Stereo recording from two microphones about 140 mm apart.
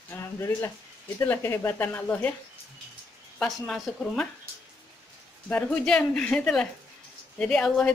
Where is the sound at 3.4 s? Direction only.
5° left (ahead or behind).